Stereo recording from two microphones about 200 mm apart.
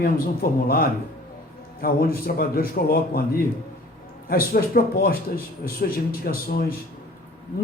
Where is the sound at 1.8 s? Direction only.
45° left (ahead or behind).